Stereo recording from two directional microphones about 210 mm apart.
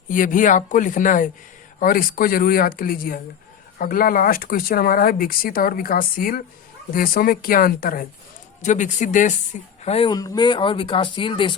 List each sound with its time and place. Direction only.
0.1 s speech: 40° left (ahead or behind); by 11.5 s 25° left (ahead or behind)